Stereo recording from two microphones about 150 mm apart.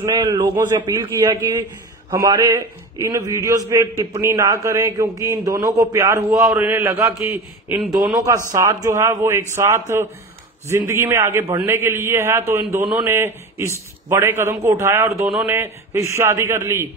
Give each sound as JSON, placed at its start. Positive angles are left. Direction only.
{"t": 0.0, "sound": "a man's voice", "side_deg": -25}
{"t": 6.9, "sound": "a man's voice", "side_deg": -25}